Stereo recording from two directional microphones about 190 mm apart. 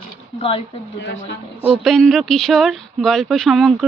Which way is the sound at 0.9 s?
70° left (ahead or behind).